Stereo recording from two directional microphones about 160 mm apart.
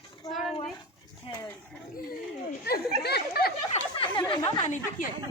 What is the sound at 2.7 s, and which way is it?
Speech, 75° left (ahead or behind).